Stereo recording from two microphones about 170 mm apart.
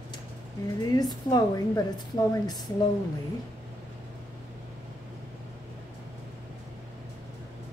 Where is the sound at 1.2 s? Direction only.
20° left (ahead or behind).